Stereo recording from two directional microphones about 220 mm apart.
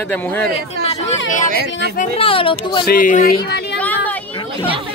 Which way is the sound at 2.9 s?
40° left (ahead or behind).